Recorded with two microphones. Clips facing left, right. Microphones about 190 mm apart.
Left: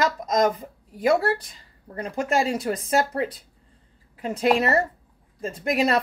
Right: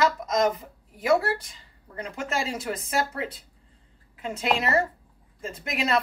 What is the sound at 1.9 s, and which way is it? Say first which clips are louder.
Speech: left 6 dB; 35° left (ahead or behind).